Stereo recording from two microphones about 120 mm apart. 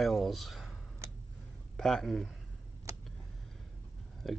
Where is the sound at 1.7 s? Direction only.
5° left (ahead or behind).